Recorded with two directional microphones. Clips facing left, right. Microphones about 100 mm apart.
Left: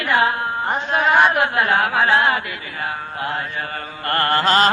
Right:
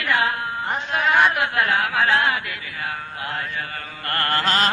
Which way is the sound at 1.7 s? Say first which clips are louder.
Left 3 dB; 35° left (ahead or behind).